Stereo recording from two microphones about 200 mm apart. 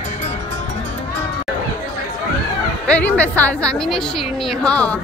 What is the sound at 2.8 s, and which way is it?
A woman's voice, 5° left (ahead or behind).